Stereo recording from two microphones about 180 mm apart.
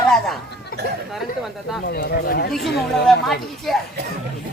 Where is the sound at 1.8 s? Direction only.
70° left (ahead or behind).